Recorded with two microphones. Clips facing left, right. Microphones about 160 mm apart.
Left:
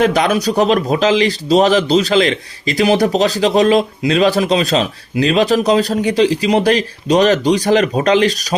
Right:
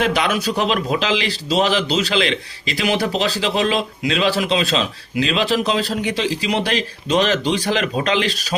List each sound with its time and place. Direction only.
0.0 s a man's voice: 40° left (ahead or behind)